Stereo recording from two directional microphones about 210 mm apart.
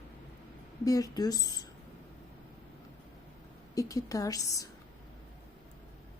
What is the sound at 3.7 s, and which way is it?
Speech, 15° left (ahead or behind).